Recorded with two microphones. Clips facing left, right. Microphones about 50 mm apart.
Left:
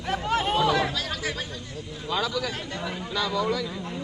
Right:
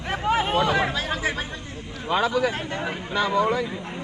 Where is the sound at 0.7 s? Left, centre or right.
Right.